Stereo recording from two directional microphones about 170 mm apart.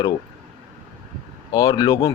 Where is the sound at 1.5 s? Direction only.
25° left (ahead or behind).